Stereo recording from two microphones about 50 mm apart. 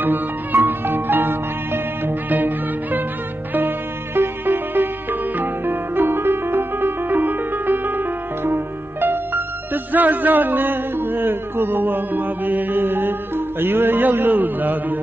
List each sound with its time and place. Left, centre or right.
0.0 s music: right
2.2 s music: right
13.6 s mantra: right